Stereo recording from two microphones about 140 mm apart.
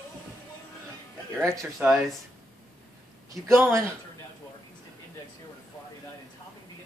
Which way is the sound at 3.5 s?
15° right (ahead or behind).